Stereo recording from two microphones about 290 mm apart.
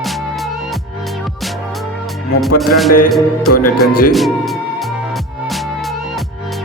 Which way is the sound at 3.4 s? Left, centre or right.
Left.